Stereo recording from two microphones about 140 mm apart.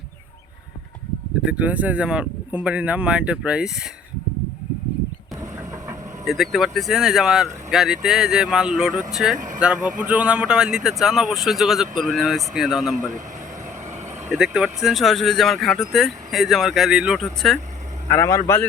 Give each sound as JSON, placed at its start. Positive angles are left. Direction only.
{"t": 1.4, "sound": "speech", "side_deg": -10}
{"t": 6.2, "sound": "speech", "side_deg": 0}
{"t": 14.3, "sound": "speech", "side_deg": -5}
{"t": 18.1, "sound": "speech", "side_deg": 20}